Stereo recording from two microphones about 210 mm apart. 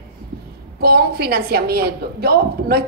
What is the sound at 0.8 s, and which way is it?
A woman's voice, 45° right (ahead or behind).